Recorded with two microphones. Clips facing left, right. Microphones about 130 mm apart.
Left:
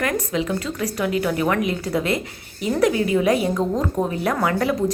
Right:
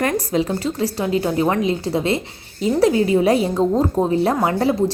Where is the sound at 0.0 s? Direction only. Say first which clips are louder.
Right 3 dB; 30° right (ahead or behind).